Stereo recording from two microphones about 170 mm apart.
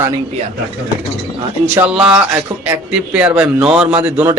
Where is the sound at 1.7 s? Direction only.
10° right (ahead or behind).